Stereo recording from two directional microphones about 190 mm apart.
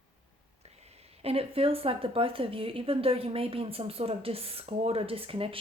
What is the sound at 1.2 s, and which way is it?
A woman's voice, 30° right (ahead or behind).